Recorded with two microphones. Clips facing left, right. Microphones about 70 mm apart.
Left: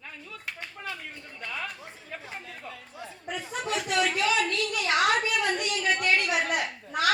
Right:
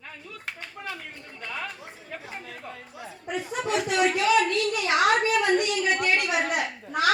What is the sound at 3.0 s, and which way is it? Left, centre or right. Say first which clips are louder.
Speech: right 4 dB; right.